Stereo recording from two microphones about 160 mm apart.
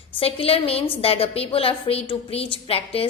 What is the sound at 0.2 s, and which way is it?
A woman's voice, 35° left (ahead or behind).